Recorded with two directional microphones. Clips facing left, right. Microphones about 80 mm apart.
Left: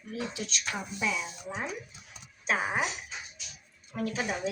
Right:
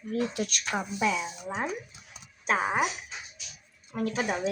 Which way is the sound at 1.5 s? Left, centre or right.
Right.